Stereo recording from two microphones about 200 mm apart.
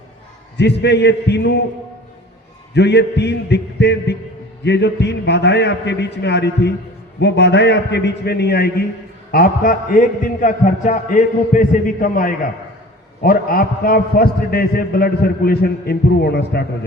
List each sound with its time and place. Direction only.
0.5 s a man's voice: 60° left (ahead or behind)
2.7 s a man's voice: 60° left (ahead or behind)